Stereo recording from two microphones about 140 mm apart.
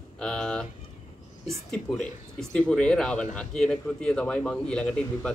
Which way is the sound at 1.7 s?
5° left (ahead or behind).